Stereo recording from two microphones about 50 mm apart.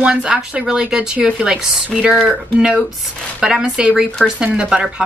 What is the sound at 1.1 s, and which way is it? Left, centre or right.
Speech, right.